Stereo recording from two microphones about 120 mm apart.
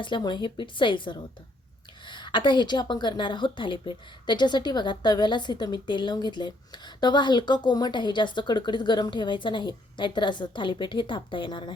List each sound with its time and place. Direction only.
0.0 s a woman's voice: 40° left (ahead or behind)